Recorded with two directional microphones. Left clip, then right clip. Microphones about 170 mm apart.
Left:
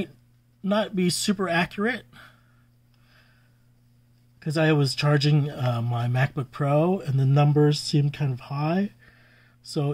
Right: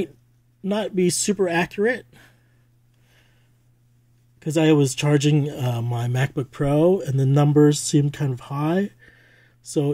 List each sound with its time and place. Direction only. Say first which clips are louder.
0.6 s speech: right 2 dB; 15° right (ahead or behind)
4.4 s speech: right 5 dB; 20° right (ahead or behind)